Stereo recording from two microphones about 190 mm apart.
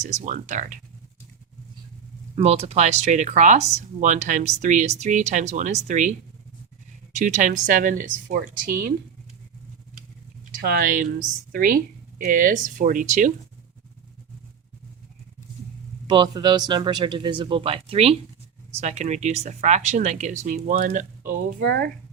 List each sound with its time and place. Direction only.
0.0 s speech: 40° right (ahead or behind)
2.3 s speech: 30° right (ahead or behind); by 8.9 s 50° right (ahead or behind)
10.5 s speech: 50° right (ahead or behind)
16.0 s speech: 25° right (ahead or behind); by 21.1 s 45° right (ahead or behind)
21.6 s speech: 55° right (ahead or behind)